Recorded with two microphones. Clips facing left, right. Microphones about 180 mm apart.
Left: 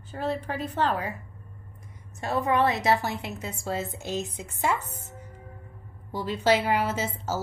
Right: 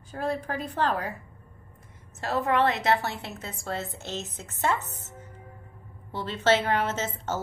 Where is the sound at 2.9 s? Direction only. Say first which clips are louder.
Left 1 dB; 20° left (ahead or behind).